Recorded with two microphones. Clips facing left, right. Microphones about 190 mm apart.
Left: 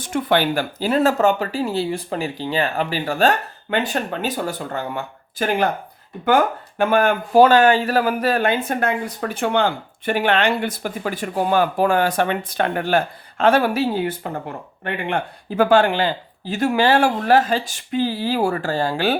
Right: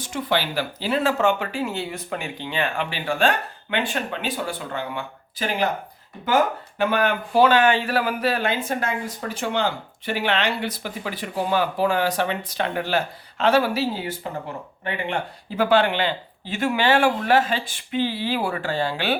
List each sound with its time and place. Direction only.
0.0 s speech: 55° left (ahead or behind)